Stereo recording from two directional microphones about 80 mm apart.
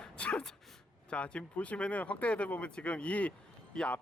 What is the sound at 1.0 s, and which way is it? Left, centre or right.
Speech, centre.